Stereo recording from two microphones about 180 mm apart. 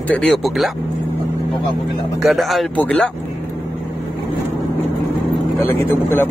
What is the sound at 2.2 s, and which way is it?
Speech, centre (ahead or behind).